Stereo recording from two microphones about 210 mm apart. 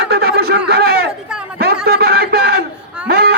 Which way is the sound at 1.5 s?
50° right (ahead or behind).